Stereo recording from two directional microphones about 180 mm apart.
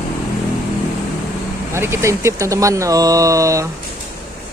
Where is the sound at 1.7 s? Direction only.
15° right (ahead or behind).